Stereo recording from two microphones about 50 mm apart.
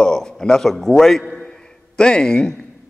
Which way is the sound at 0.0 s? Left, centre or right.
Centre.